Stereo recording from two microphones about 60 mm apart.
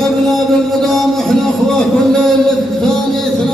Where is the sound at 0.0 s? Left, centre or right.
Centre.